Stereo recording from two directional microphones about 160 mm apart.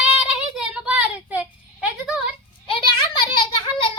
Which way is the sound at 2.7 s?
30° left (ahead or behind).